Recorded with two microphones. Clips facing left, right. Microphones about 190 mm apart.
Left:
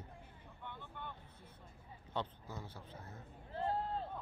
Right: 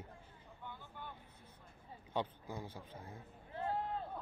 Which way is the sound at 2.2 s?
10° right (ahead or behind).